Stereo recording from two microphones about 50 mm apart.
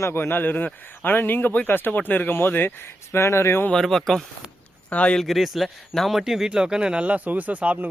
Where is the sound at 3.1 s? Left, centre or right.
Left.